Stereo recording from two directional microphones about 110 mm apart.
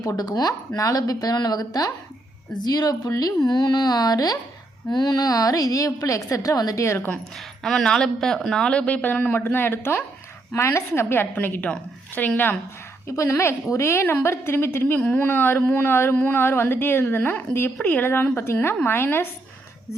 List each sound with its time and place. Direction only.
0.0 s a woman's voice: 35° left (ahead or behind)
7.1 s a woman's voice: centre (ahead or behind); by 19.3 s 20° left (ahead or behind)